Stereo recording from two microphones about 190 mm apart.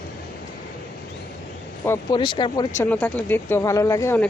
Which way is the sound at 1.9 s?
25° left (ahead or behind).